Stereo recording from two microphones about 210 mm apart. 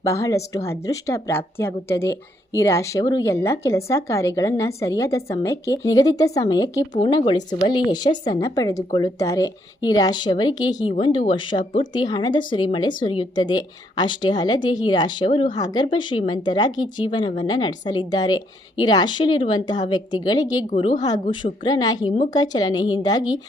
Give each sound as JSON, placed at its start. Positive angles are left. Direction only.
{"t": 0.0, "sound": "speech", "side_deg": 15}